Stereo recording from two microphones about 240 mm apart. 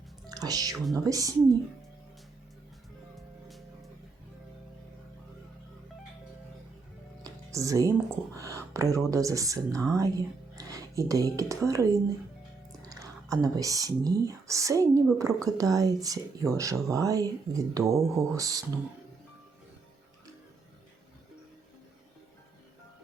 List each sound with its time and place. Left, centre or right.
0.3 s speech: centre
7.3 s speech: centre